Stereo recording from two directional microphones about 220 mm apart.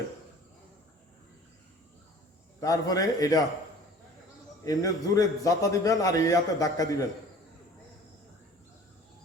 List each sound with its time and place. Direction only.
2.6 s a man's voice: 15° left (ahead or behind)
4.6 s a man's voice: 15° left (ahead or behind)